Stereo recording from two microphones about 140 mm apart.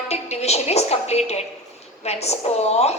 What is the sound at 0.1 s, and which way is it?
A woman's voice, 50° left (ahead or behind).